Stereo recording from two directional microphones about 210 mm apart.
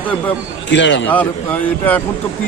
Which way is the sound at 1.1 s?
10° left (ahead or behind).